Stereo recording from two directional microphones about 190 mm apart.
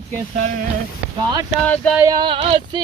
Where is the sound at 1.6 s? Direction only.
5° left (ahead or behind).